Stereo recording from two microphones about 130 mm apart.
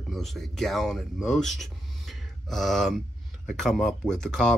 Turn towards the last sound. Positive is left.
turn(degrees=5)  # may be behind; listen again after turning